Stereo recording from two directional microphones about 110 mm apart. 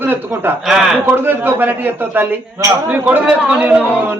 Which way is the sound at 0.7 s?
5° right (ahead or behind).